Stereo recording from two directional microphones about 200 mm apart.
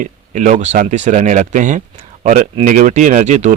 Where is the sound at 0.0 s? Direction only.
40° right (ahead or behind).